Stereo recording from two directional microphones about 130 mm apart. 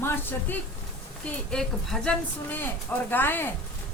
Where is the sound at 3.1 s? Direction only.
15° left (ahead or behind).